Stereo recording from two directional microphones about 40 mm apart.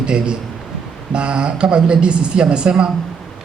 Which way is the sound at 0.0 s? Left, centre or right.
Right.